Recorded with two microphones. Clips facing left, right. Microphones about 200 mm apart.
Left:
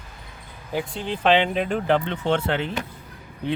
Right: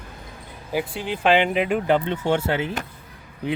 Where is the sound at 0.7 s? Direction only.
5° right (ahead or behind).